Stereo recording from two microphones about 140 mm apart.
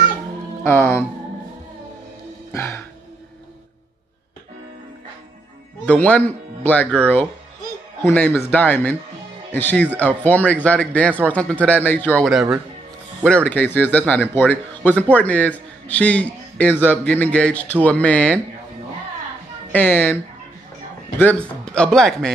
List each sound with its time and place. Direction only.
0.7 s a man's voice: 15° left (ahead or behind)
2.5 s music: 15° left (ahead or behind)
5.9 s a man's voice: 10° left (ahead or behind)
8.0 s a man's voice: 10° left (ahead or behind)
12.3 s speech: centre (ahead or behind)
13.2 s a man's voice: 10° left (ahead or behind)
19.7 s a man's voice: 10° left (ahead or behind)
21.2 s a man's voice: 10° left (ahead or behind)